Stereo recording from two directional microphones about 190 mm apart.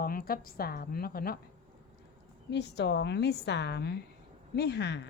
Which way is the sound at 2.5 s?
65° left (ahead or behind).